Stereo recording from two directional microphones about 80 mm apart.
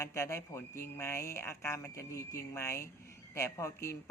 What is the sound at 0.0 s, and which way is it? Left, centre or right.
Speech, left.